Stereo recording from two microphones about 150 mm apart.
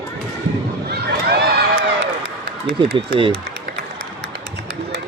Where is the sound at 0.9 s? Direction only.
90° right.